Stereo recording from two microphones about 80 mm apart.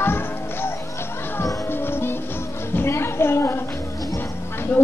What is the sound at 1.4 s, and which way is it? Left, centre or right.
Music, left.